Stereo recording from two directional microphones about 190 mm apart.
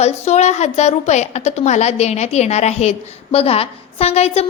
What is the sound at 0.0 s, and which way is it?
A woman's voice, 35° left (ahead or behind).